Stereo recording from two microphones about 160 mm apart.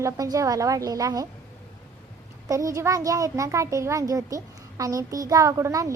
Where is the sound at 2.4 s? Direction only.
20° right (ahead or behind).